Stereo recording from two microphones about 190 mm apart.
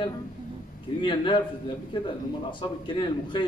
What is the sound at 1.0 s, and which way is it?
Speech, 25° left (ahead or behind).